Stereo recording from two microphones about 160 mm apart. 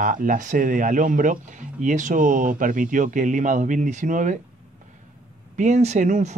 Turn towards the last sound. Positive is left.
turn(degrees=-50)  # may be behind; listen again after turning